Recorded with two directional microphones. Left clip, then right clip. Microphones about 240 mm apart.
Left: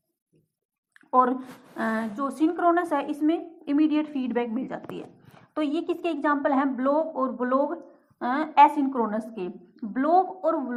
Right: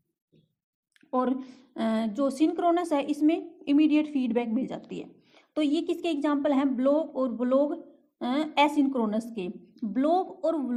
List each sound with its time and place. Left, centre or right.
0.9 s speech: right